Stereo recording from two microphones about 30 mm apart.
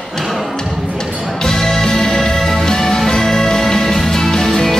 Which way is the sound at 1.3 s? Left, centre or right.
Left.